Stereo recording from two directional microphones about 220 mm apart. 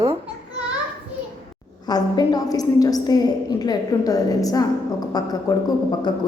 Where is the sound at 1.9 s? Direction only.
20° left (ahead or behind).